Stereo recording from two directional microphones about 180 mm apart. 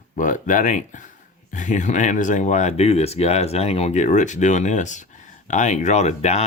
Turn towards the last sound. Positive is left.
turn(degrees=40)  # may be behind; listen again after turning